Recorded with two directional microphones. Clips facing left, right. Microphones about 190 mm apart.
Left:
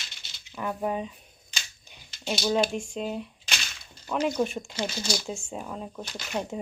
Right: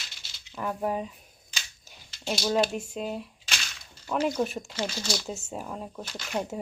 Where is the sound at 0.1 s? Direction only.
Centre (ahead or behind).